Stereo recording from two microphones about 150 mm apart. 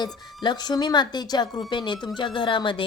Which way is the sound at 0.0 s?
30° left (ahead or behind).